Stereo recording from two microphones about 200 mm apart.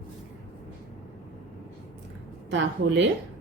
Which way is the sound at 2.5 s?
65° right (ahead or behind).